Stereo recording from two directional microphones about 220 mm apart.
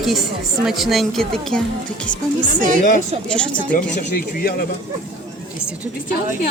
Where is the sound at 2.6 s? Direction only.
35° right (ahead or behind).